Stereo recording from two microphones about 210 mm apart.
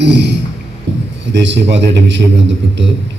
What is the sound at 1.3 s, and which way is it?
A man's voice, 60° right (ahead or behind).